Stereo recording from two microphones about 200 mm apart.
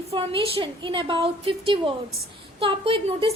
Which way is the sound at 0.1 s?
25° right (ahead or behind).